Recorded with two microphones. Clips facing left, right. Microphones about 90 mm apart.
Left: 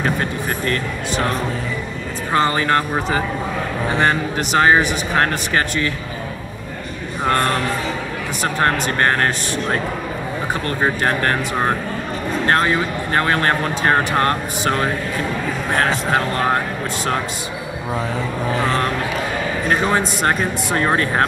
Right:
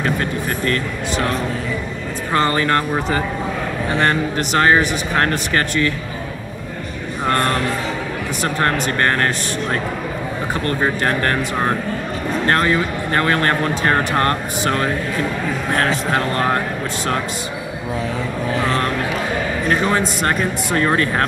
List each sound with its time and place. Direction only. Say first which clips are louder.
0.0 s speech: even; 20° left (ahead or behind)
2.3 s speech: even; 15° left (ahead or behind)
7.2 s music: even; centre (ahead or behind)
8.8 s speech: even; 10° left (ahead or behind)
10.5 s speech: right 1 dB; 10° left (ahead or behind)
18.6 s speech: even; 10° left (ahead or behind)